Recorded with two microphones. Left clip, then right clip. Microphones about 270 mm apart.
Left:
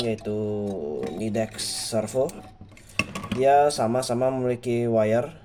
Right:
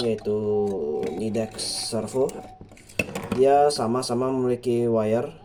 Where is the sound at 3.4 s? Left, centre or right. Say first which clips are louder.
Even; left.